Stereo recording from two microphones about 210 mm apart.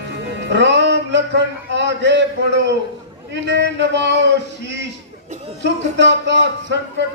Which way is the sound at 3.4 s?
55° right (ahead or behind).